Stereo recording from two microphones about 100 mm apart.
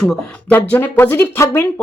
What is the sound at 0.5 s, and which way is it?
Speech, 15° left (ahead or behind).